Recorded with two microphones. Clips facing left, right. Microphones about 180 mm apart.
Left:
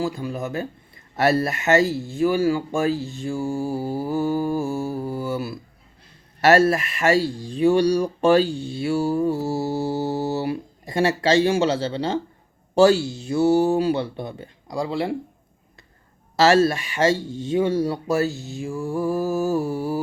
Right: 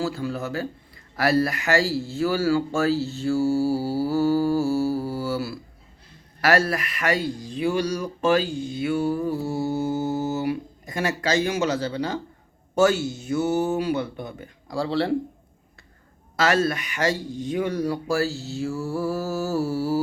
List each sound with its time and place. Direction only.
0.0 s a man's voice: 15° left (ahead or behind)
13.0 s speech: 20° right (ahead or behind)
13.3 s speech: 30° left (ahead or behind)
14.8 s speech: 10° left (ahead or behind)
16.4 s speech: 25° left (ahead or behind)